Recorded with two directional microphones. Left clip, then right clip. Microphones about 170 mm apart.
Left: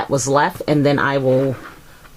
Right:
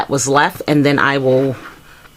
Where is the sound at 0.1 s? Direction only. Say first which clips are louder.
Right 2 dB; 20° right (ahead or behind).